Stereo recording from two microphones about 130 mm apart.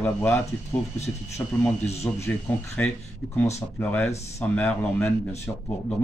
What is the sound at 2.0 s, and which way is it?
Speech, 20° left (ahead or behind).